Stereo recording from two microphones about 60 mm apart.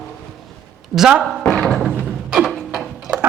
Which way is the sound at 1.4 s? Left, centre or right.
Centre.